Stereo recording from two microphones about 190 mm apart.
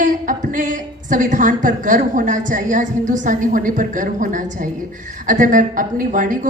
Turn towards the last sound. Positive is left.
turn(degrees=-45)  # may be behind; listen again after turning